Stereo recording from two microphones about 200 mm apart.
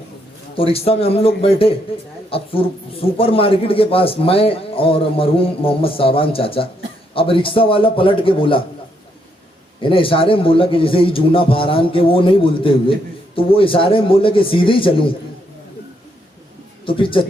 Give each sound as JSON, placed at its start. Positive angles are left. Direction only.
{"t": 0.5, "sound": "a man's voice", "side_deg": 30}
{"t": 9.8, "sound": "a man's voice", "side_deg": 25}
{"t": 16.8, "sound": "a man's voice", "side_deg": 25}